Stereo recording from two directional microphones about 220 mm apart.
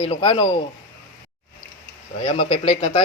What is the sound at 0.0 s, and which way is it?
Speech, 25° left (ahead or behind).